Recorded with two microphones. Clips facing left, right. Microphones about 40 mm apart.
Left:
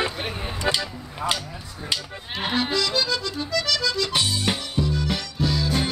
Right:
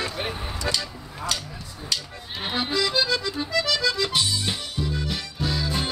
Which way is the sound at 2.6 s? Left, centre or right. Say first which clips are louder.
Right 1 dB; centre.